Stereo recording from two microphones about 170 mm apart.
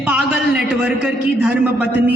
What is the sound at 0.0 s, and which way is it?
A man's voice, 5° right (ahead or behind).